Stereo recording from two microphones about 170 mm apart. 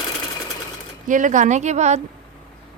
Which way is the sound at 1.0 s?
50° right (ahead or behind).